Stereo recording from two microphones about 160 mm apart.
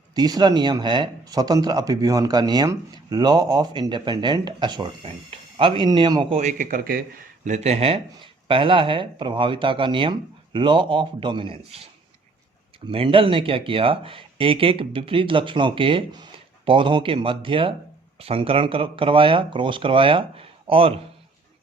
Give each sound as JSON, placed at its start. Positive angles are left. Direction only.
{"t": 0.1, "sound": "speech", "side_deg": -25}
{"t": 6.3, "sound": "a man's voice", "side_deg": -55}
{"t": 7.4, "sound": "speech", "side_deg": -45}
{"t": 12.9, "sound": "speech", "side_deg": -35}